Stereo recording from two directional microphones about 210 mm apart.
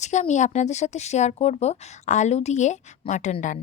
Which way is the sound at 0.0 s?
35° left (ahead or behind).